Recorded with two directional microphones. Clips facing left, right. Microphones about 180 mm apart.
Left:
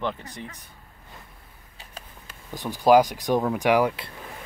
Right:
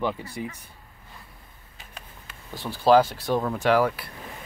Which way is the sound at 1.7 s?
35° left (ahead or behind).